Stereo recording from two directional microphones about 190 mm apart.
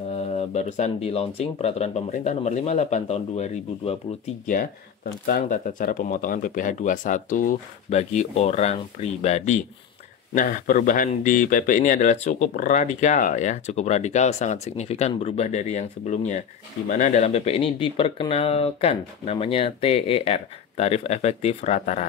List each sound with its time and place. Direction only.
0.1 s speech: 35° left (ahead or behind)
5.2 s speech: 45° left (ahead or behind)